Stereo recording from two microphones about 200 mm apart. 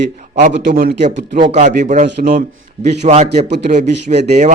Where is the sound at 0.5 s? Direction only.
50° right (ahead or behind).